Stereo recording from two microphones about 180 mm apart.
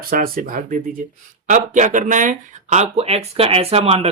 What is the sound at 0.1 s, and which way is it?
Speech, 50° right (ahead or behind).